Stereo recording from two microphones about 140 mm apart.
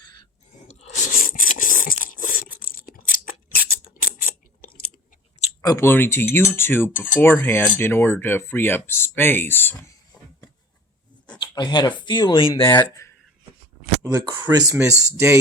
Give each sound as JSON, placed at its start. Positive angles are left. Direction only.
{"t": 0.7, "sound": "a sound", "side_deg": 55}
{"t": 3.5, "sound": "scissors", "side_deg": 90}
{"t": 5.6, "sound": "speech", "side_deg": 20}
{"t": 11.3, "sound": "speech", "side_deg": 30}
{"t": 14.0, "sound": "speech", "side_deg": -25}